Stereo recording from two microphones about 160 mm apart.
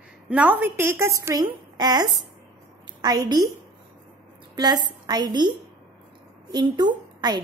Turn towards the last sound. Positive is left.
turn(degrees=-25)  # may be behind; listen again after turning